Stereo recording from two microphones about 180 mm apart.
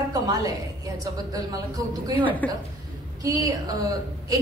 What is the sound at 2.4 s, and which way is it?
Speech, 10° left (ahead or behind).